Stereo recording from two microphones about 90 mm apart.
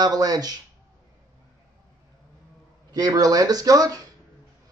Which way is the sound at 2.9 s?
45° right (ahead or behind).